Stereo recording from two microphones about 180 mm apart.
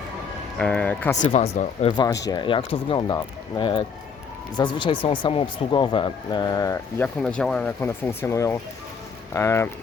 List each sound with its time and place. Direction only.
0.6 s speech: 10° left (ahead or behind)
1.3 s speech: 40° left (ahead or behind); by 6.7 s 20° left (ahead or behind)
7.0 s speech: 5° left (ahead or behind)